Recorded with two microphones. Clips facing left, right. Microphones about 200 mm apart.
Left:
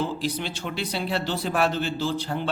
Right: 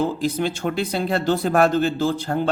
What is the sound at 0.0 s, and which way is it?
Speech, 45° right (ahead or behind).